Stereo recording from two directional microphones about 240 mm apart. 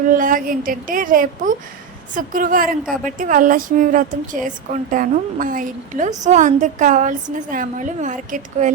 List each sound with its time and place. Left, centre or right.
0.1 s a woman's voice: right